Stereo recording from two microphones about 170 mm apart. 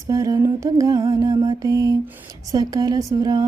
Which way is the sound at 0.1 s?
20° right (ahead or behind).